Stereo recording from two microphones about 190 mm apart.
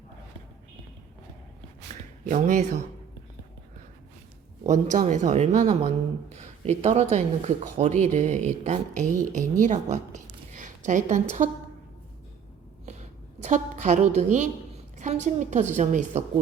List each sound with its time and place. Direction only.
2.2 s a woman's voice: 40° right (ahead or behind)
4.7 s a woman's voice: 40° right (ahead or behind)
12.8 s a sound: 35° right (ahead or behind)
14.9 s a woman's voice: 40° right (ahead or behind)